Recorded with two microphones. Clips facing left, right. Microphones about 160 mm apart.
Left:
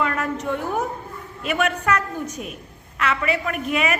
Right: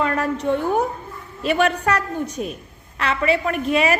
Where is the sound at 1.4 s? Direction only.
30° right (ahead or behind).